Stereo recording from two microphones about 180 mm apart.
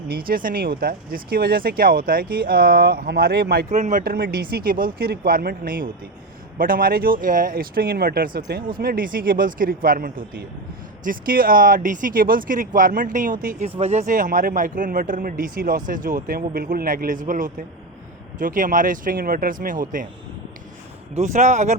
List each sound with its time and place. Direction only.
0.1 s speech: 55° right (ahead or behind)
3.7 s speech: 45° right (ahead or behind)
13.7 s speech: 40° right (ahead or behind)
21.2 s speech: 40° right (ahead or behind)